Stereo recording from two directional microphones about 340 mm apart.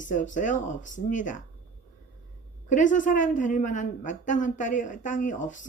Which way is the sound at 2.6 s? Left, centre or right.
Left.